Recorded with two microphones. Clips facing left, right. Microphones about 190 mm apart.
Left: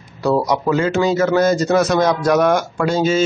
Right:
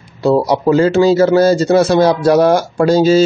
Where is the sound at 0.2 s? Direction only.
25° right (ahead or behind).